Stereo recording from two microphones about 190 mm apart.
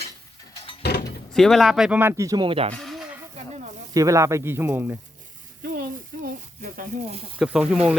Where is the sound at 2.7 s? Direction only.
Centre (ahead or behind).